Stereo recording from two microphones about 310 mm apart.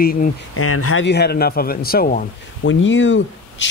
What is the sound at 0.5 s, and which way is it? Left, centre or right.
Speech, left.